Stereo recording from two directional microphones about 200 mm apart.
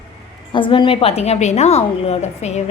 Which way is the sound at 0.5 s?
25° left (ahead or behind).